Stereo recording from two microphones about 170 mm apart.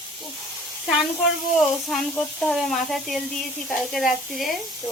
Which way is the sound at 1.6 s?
Centre (ahead or behind).